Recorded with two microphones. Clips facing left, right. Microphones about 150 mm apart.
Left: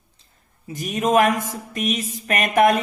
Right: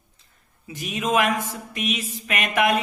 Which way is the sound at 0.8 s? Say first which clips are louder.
Left 5 dB; 45° left (ahead or behind).